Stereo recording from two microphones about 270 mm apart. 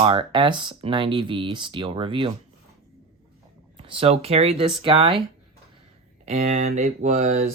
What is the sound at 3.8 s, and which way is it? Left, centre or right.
Speech, centre.